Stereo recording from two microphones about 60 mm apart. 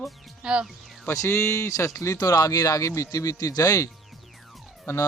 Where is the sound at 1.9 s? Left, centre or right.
Left.